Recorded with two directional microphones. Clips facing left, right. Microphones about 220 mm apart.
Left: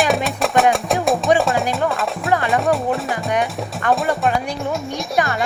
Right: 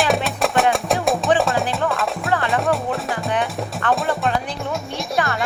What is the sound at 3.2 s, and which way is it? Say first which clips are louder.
Music: left 2 dB; 15° left (ahead or behind).